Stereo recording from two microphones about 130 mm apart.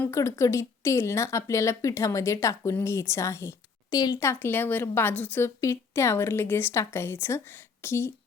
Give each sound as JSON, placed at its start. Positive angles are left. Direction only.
{"t": 0.0, "sound": "a woman's voice", "side_deg": 20}